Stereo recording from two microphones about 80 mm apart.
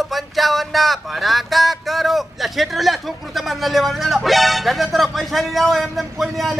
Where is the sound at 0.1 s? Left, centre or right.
Centre.